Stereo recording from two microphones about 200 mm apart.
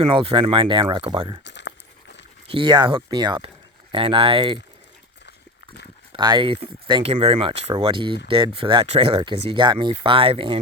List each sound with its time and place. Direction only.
0.0 s speech: 25° right (ahead or behind)
1.5 s a sound: 60° left (ahead or behind)
2.5 s speech: 25° right (ahead or behind)
6.1 s speech: 20° right (ahead or behind)